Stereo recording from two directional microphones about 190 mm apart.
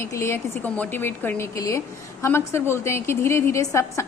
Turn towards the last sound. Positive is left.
turn(degrees=15)  # may be behind; listen again after turning